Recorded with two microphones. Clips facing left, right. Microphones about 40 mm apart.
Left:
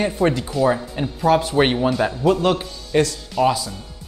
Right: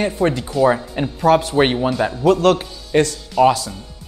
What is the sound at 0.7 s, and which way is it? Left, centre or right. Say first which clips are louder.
Speech: right 3 dB; centre.